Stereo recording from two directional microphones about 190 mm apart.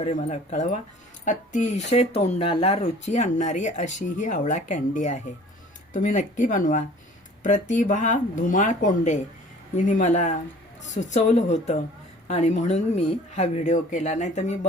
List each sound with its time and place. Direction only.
0.0 s speech: 40° left (ahead or behind)